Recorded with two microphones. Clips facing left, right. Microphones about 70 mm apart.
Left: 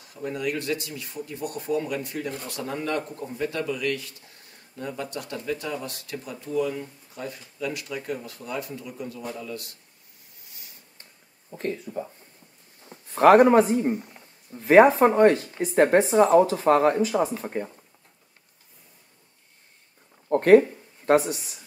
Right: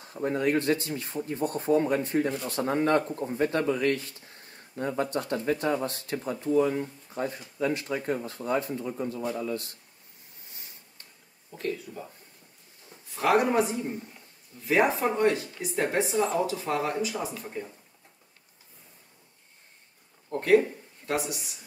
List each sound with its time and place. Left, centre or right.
0.0 s speech: right
11.5 s speech: left
12.8 s a sound: left
13.2 s speech: left
20.2 s a sound: left
21.0 s speech: left